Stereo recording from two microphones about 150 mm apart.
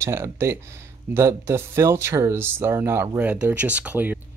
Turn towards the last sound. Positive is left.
turn(degrees=-10)  # may be behind; listen again after turning